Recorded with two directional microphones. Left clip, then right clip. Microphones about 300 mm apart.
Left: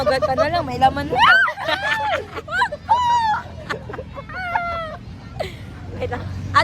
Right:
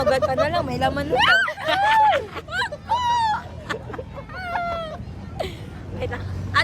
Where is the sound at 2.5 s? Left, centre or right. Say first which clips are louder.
Left 8 dB; centre.